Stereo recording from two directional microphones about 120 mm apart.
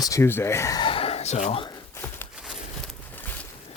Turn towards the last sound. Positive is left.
turn(degrees=15)  # may be behind; listen again after turning